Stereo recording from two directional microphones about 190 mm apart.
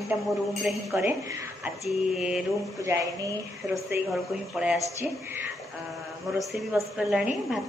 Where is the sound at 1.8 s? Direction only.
5° right (ahead or behind).